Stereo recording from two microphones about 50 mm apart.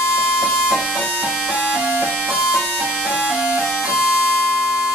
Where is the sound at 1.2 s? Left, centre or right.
Right.